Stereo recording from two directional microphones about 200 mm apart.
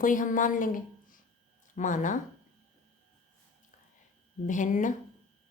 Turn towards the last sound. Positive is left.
turn(degrees=40)  # may be behind; listen again after turning